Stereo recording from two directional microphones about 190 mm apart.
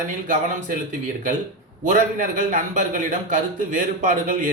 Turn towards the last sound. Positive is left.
turn(degrees=-45)  # may be behind; listen again after turning